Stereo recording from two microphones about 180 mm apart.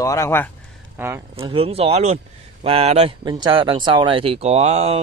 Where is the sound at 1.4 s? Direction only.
30° right (ahead or behind).